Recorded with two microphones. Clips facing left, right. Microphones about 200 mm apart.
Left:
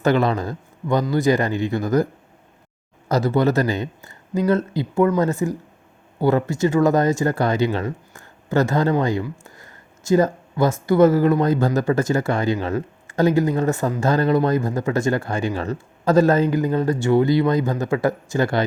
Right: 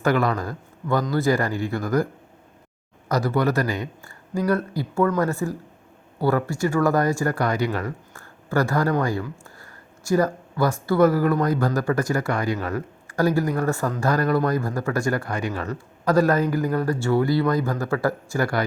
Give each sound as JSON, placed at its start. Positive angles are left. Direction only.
{"t": 0.0, "sound": "a man's voice", "side_deg": 25}
{"t": 3.1, "sound": "speech", "side_deg": 25}